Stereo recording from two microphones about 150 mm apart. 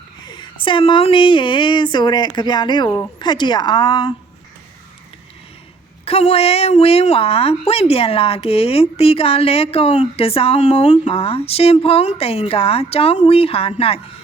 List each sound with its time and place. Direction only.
0.3 s a woman's voice: 30° left (ahead or behind)
6.1 s a woman's voice: 40° left (ahead or behind)
10.9 s a woman's voice: 35° left (ahead or behind)